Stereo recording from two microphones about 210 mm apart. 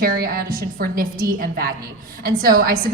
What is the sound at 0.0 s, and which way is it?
A woman's voice, 45° right (ahead or behind).